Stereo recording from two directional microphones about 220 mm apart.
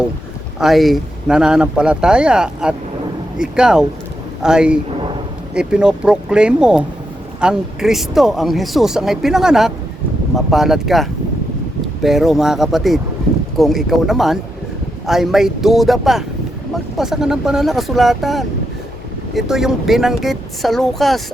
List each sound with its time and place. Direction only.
0.6 s speech: centre (ahead or behind)